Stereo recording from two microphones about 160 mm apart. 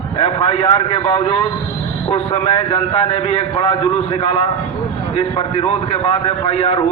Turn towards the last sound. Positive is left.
turn(degrees=35)  # may be behind; listen again after turning